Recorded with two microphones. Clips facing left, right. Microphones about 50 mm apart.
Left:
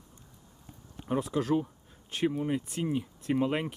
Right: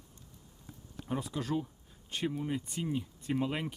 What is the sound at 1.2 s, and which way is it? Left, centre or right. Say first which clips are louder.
Speech: left 7 dB; centre.